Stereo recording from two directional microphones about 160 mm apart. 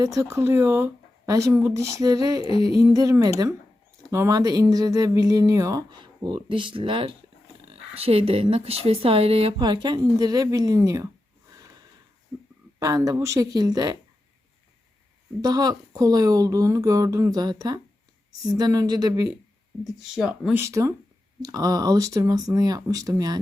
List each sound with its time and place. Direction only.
0.0 s speech: 20° right (ahead or behind)
12.8 s speech: 20° right (ahead or behind)
15.4 s speech: 25° right (ahead or behind)
20.1 s speech: 5° right (ahead or behind)
20.6 s speech: 20° right (ahead or behind)